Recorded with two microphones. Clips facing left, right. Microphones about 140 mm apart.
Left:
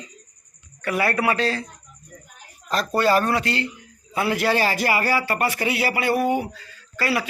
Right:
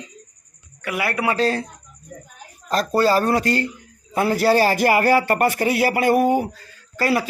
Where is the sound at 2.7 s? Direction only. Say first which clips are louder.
Right 2 dB; 40° right (ahead or behind).